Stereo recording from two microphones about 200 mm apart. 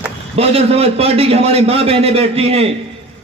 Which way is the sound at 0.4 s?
30° right (ahead or behind).